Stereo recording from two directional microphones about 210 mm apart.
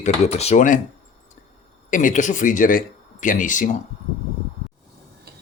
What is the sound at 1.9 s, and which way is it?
Speech, 40° left (ahead or behind).